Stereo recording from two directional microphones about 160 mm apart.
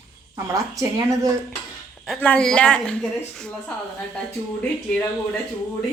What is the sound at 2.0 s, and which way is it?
Speech, 5° left (ahead or behind).